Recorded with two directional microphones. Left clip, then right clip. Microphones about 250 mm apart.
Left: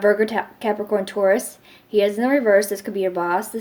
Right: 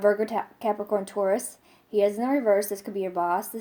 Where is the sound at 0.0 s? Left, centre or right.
Right.